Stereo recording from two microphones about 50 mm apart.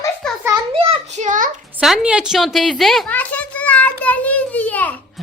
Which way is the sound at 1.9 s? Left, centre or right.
Right.